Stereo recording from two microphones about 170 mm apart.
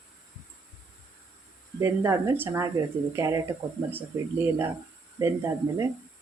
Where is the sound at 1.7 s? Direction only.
15° right (ahead or behind).